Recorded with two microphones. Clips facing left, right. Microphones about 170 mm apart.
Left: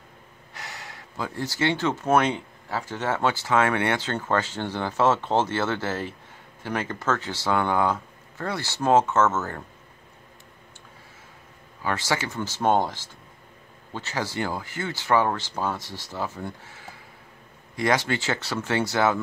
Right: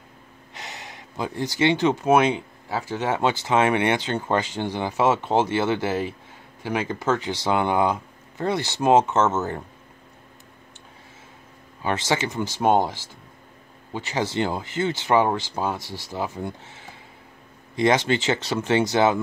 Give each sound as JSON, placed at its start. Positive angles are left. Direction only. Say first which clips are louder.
{"t": 0.6, "sound": "speech", "louder": "right 1 dB", "side_deg": -20}
{"t": 11.8, "sound": "speech", "louder": "right 3 dB", "side_deg": -20}